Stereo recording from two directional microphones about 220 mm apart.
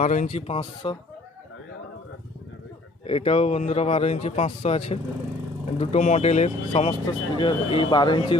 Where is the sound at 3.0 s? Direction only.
25° left (ahead or behind).